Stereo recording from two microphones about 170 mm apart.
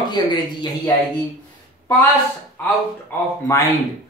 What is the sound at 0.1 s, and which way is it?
Speech, 25° left (ahead or behind).